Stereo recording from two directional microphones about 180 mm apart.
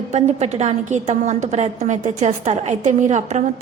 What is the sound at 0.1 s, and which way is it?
A woman's voice, 40° right (ahead or behind).